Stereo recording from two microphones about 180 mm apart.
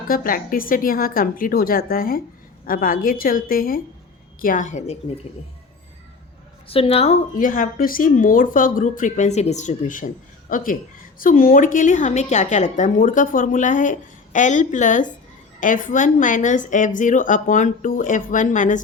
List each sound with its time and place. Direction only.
0.1 s a woman's voice: 50° left (ahead or behind)
6.7 s a woman's voice: 35° left (ahead or behind)